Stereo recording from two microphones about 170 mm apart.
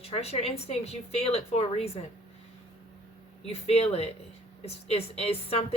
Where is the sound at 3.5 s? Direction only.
35° left (ahead or behind).